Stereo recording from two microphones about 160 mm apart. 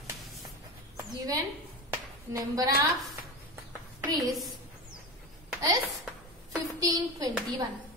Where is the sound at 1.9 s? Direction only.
15° right (ahead or behind).